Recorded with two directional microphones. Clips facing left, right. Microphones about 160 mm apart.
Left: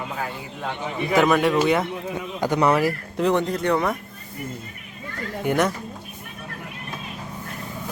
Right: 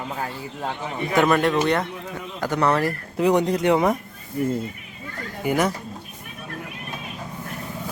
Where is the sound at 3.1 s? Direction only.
10° right (ahead or behind).